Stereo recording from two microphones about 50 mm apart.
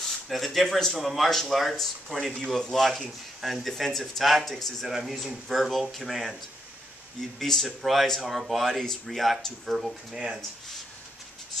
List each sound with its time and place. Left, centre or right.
0.3 s speech: centre
0.9 s speech: centre
4.8 s speech: centre
7.3 s speech: centre
10.1 s speech: centre